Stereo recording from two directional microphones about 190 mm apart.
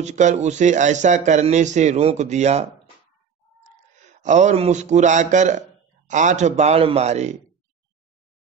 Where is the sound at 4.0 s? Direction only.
40° right (ahead or behind).